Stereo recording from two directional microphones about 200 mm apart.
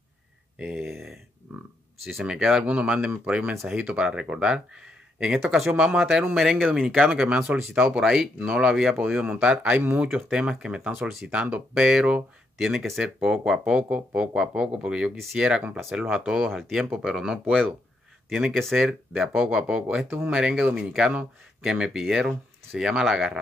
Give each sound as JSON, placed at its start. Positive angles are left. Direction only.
{"t": 0.6, "sound": "speech", "side_deg": -5}